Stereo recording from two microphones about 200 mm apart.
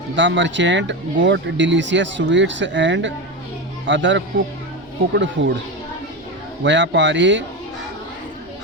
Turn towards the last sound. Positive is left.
turn(degrees=-65)  # may be behind; listen again after turning